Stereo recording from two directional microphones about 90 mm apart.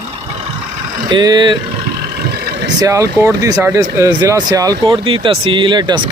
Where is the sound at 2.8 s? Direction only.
40° right (ahead or behind).